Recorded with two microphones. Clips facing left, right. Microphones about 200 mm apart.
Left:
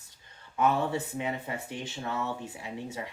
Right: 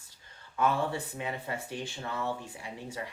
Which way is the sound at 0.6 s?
20° left (ahead or behind).